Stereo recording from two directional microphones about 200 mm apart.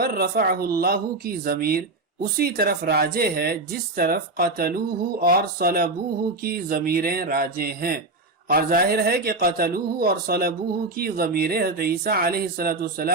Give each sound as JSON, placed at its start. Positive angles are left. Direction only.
{"t": 0.0, "sound": "speech", "side_deg": -50}